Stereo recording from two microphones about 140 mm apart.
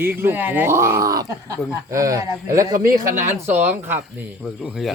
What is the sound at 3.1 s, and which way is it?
Speech, 65° right (ahead or behind).